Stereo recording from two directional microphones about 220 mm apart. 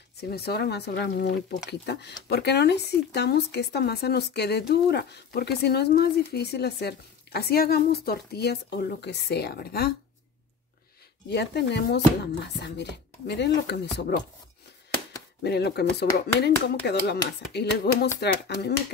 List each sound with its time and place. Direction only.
0.2 s speech: 45° left (ahead or behind)
11.2 s speech: 50° left (ahead or behind)
15.4 s speech: 50° left (ahead or behind)